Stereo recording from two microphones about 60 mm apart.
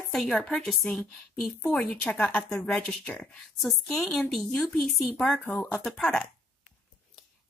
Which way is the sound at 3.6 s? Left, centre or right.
Centre.